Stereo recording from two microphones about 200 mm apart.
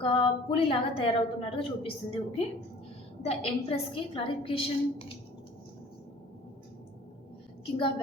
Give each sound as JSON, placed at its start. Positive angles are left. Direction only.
{"t": 0.0, "sound": "a woman's voice", "side_deg": 25}
{"t": 7.8, "sound": "a woman's voice", "side_deg": 25}